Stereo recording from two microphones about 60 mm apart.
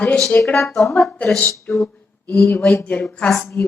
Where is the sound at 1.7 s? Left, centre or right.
Left.